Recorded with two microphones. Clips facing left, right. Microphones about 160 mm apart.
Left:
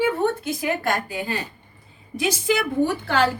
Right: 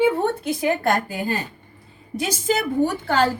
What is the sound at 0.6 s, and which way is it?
A woman's voice, 40° right (ahead or behind).